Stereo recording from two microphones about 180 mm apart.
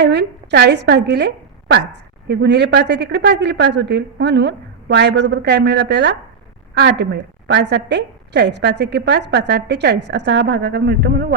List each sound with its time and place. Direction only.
0.0 s a woman's voice: 70° right (ahead or behind)